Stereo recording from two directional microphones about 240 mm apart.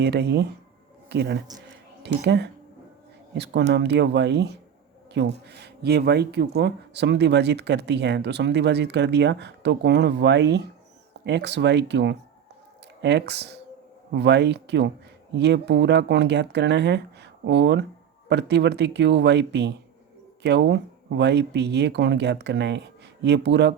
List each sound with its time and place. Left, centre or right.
0.0 s speech: right